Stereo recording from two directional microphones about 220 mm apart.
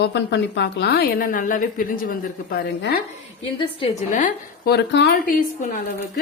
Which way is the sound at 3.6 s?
25° left (ahead or behind).